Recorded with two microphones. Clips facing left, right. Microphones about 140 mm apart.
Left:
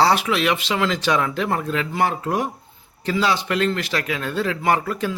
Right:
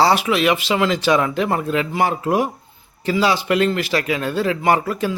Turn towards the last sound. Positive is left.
turn(degrees=0)  # may be behind; listen again after turning